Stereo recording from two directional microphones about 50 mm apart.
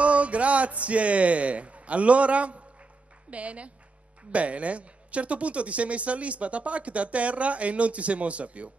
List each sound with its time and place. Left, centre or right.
0.0 s a woman's voice: right